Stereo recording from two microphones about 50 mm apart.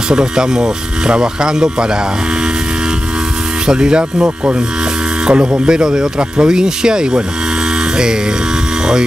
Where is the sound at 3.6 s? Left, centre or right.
Centre.